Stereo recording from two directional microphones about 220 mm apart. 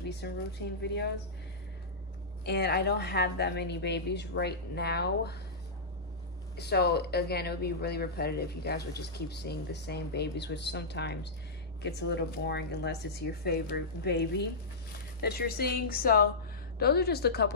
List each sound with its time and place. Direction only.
0.1 s speech: 50° left (ahead or behind)
2.4 s speech: 50° left (ahead or behind)
6.5 s speech: 50° left (ahead or behind)